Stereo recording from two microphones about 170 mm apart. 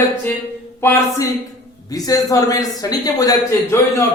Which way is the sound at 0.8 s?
15° left (ahead or behind).